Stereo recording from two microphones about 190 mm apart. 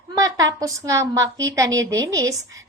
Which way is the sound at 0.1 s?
20° right (ahead or behind).